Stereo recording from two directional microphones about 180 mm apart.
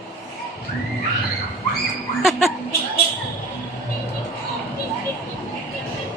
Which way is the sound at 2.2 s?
Centre (ahead or behind).